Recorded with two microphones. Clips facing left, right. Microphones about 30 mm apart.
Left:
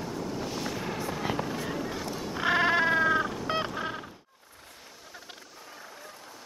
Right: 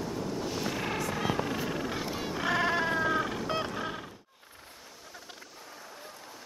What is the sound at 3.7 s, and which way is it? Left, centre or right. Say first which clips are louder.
Music: left 2 dB; centre.